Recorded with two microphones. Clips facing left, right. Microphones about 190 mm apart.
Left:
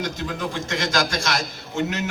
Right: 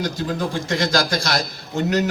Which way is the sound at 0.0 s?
35° right (ahead or behind).